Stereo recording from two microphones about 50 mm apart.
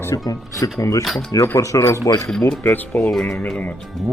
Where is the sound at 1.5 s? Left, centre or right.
Left.